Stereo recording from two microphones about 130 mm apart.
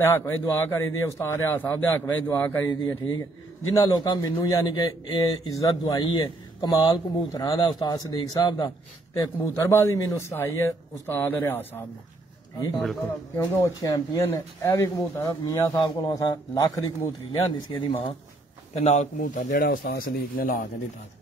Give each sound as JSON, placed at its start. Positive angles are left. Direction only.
{"t": 0.0, "sound": "a man's voice", "side_deg": 15}
{"t": 3.7, "sound": "speech", "side_deg": 30}
{"t": 13.4, "sound": "speech", "side_deg": 25}
{"t": 17.4, "sound": "speech", "side_deg": 45}
{"t": 18.8, "sound": "speech", "side_deg": 60}